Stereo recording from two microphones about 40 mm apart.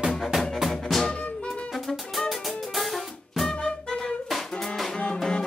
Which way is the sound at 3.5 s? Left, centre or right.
Centre.